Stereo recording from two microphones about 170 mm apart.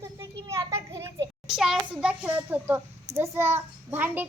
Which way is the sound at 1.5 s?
5° right (ahead or behind).